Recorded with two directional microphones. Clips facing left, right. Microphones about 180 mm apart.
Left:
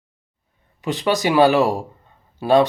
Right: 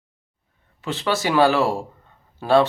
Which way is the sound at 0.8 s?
15° left (ahead or behind).